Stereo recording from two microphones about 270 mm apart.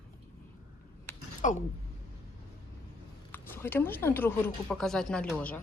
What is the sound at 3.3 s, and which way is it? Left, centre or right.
Speech, centre.